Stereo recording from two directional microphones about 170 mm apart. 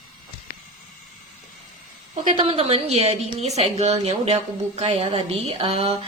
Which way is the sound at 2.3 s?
35° right (ahead or behind).